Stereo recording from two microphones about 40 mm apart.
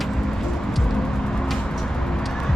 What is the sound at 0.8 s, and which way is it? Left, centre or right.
Music, centre.